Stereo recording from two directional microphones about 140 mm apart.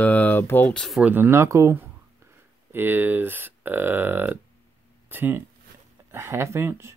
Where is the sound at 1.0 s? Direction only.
15° right (ahead or behind).